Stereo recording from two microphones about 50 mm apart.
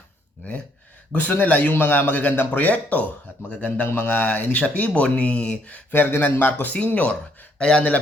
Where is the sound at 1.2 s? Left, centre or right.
Left.